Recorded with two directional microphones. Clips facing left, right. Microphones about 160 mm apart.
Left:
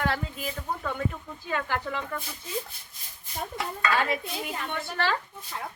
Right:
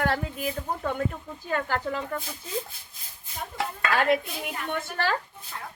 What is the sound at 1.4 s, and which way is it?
Speech, 40° right (ahead or behind).